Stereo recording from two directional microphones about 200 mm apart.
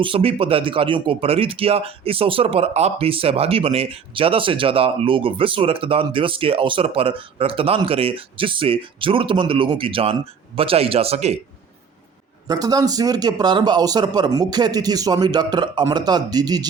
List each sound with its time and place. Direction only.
0.0 s speech: 30° right (ahead or behind)
12.5 s speech: 20° right (ahead or behind)